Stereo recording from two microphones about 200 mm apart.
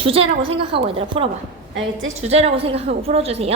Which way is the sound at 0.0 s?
30° right (ahead or behind).